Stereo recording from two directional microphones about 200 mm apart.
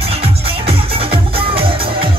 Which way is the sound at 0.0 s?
30° right (ahead or behind).